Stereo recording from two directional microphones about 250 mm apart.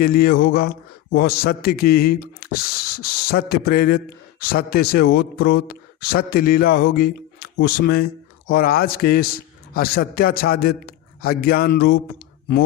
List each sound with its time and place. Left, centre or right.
0.0 s a man's voice: left